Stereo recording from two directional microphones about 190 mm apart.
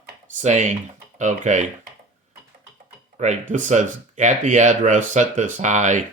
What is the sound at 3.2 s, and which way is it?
Speech, 40° right (ahead or behind).